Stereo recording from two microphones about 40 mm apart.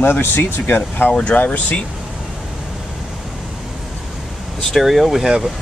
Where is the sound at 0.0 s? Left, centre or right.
Left.